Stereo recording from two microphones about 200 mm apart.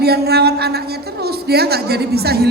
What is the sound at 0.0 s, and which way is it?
A man's voice, 50° right (ahead or behind).